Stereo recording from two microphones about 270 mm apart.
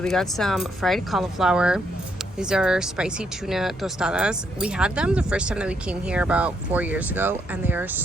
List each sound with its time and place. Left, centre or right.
0.0 s speech: centre